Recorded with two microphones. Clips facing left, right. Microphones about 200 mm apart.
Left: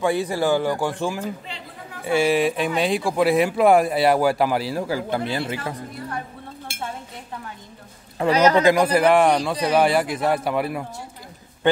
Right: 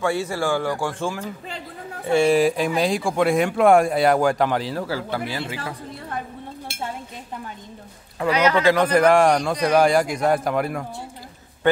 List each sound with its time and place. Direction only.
0.0 s speech: 15° left (ahead or behind)
2.1 s speech: centre (ahead or behind); by 5.4 s 20° left (ahead or behind)
8.3 s speech: 40° left (ahead or behind)
8.6 s speech: 10° left (ahead or behind)